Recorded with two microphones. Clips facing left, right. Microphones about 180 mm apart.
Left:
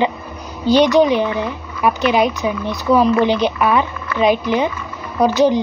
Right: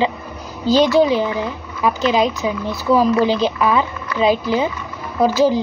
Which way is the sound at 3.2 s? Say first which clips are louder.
Left 1 dB; 15° left (ahead or behind).